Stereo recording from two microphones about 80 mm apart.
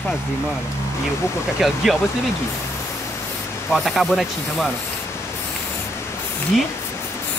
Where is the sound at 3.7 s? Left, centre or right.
Centre.